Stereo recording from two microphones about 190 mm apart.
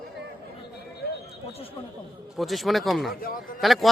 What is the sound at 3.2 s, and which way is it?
Speech, 50° left (ahead or behind).